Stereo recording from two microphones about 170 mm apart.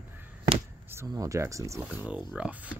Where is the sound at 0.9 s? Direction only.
20° right (ahead or behind).